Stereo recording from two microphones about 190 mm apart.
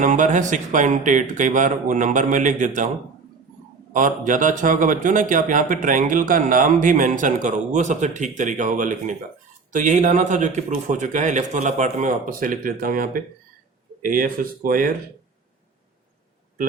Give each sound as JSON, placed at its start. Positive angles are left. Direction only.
{"t": 0.0, "sound": "a man's voice", "side_deg": -40}
{"t": 3.9, "sound": "a man's voice", "side_deg": -45}